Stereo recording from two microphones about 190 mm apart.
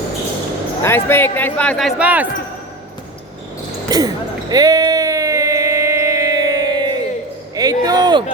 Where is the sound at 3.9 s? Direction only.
20° right (ahead or behind).